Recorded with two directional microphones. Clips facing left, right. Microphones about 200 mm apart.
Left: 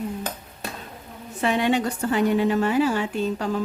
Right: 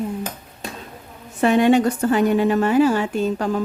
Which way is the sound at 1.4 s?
50° right (ahead or behind).